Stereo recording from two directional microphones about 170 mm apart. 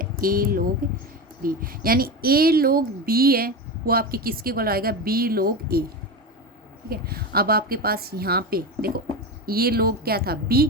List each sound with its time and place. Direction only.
0.0 s speech: 55° right (ahead or behind)
6.9 s speech: 65° right (ahead or behind)